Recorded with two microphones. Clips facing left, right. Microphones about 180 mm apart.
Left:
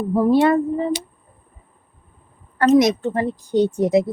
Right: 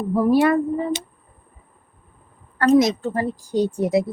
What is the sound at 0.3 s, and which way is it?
Speech, 25° left (ahead or behind).